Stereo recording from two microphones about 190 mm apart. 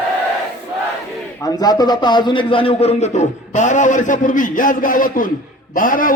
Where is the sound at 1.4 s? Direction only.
20° left (ahead or behind); by 6.1 s 45° left (ahead or behind).